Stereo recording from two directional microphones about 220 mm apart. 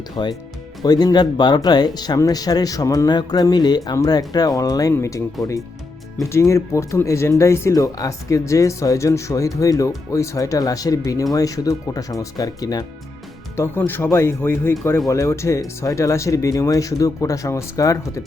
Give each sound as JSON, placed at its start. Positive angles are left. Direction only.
{"t": 0.2, "sound": "speech", "side_deg": 20}